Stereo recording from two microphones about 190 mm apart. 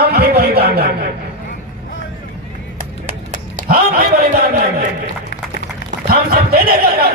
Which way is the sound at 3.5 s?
50° right (ahead or behind).